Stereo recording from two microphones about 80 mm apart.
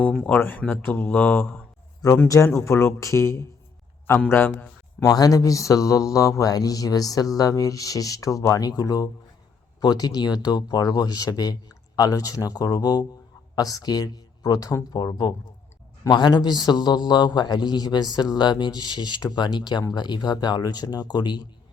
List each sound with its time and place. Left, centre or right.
0.3 s speech: left
2.2 s speech: left
4.3 s speech: left
5.0 s a man's voice: left
16.0 s a man's voice: left